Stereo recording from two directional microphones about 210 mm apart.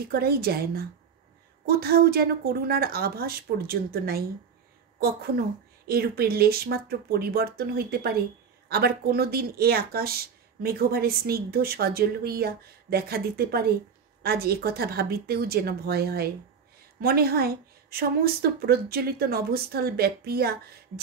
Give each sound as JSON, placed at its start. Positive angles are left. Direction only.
{"t": 0.1, "sound": "a woman's voice", "side_deg": -45}
{"t": 5.9, "sound": "a woman's voice", "side_deg": -45}